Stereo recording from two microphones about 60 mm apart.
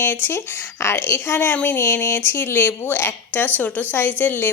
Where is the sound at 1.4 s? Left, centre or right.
Left.